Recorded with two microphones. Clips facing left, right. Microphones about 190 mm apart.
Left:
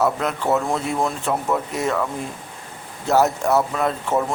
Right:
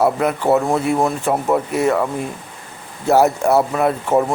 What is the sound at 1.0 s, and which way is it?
Speech, 10° right (ahead or behind).